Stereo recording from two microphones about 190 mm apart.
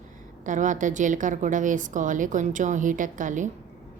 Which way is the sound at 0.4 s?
40° right (ahead or behind).